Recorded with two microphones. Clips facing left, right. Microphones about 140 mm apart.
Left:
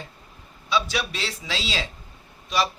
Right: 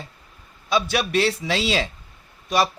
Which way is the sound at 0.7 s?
50° right (ahead or behind).